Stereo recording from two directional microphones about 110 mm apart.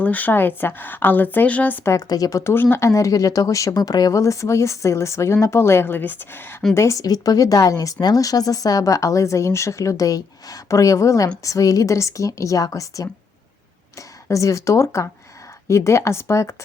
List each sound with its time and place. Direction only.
0.0 s a woman's voice: 15° left (ahead or behind); by 13.1 s 30° left (ahead or behind)
14.3 s a woman's voice: 30° left (ahead or behind)